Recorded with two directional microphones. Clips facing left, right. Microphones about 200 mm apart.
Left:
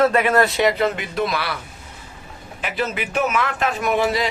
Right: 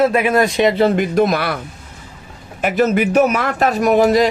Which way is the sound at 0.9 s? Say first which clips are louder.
Right 9 dB; 45° right (ahead or behind).